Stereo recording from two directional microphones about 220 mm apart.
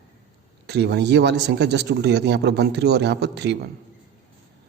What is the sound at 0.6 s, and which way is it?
A man's voice, 50° right (ahead or behind).